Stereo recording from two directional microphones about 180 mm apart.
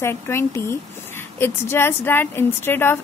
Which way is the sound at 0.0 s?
15° left (ahead or behind).